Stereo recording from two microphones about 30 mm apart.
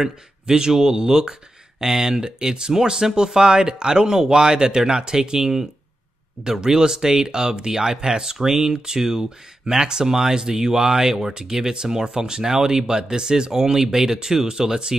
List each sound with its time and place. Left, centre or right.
0.0 s speech: right